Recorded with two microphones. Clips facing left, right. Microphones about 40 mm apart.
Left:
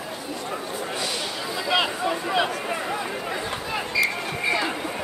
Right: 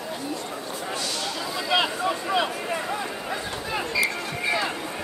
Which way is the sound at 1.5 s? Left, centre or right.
Centre.